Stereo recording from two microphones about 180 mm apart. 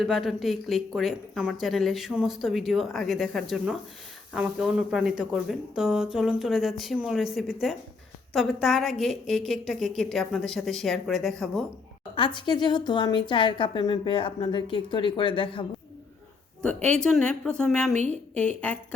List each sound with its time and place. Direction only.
0.0 s speech: centre (ahead or behind)
12.1 s a woman's voice: 25° left (ahead or behind)
16.6 s speech: 5° left (ahead or behind)